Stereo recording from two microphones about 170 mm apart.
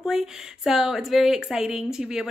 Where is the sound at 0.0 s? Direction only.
5° right (ahead or behind).